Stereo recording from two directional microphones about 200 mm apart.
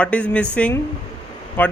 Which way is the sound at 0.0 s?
5° left (ahead or behind).